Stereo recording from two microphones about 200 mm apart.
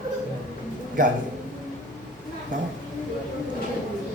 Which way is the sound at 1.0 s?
40° right (ahead or behind).